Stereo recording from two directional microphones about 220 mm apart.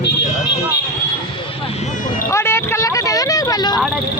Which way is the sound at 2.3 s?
10° left (ahead or behind).